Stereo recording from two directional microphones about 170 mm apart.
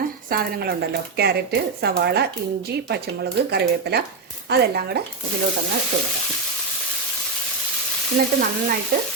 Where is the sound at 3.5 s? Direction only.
75° right (ahead or behind).